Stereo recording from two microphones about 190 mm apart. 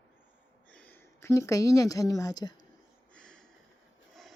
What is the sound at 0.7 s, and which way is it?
A woman's voice, 10° left (ahead or behind).